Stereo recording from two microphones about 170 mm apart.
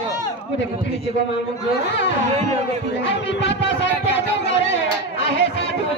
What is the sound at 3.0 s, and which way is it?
Speech, 90° left.